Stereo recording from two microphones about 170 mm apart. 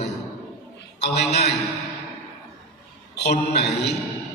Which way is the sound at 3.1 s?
75° left (ahead or behind).